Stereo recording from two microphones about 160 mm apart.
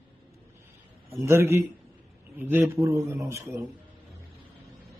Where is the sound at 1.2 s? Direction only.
15° right (ahead or behind).